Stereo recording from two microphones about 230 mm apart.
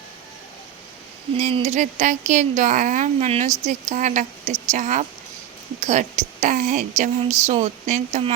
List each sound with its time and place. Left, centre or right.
1.4 s a woman's voice: right